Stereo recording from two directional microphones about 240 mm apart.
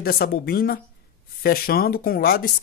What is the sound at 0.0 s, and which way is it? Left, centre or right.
Speech, left.